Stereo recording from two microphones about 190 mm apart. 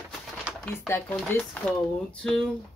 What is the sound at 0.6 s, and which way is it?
Speech, 15° left (ahead or behind).